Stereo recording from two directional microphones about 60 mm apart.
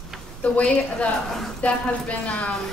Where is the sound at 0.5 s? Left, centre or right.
Left.